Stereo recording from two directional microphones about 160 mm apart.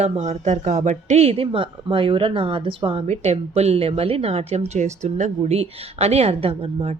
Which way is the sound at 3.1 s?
45° right (ahead or behind).